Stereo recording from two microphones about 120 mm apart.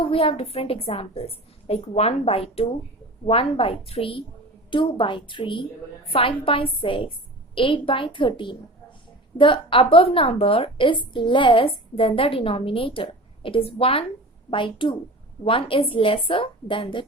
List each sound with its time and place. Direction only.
0.0 s a woman's voice: 50° left (ahead or behind)